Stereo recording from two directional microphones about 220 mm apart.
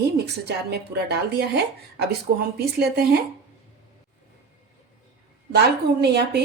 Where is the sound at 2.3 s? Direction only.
45° right (ahead or behind).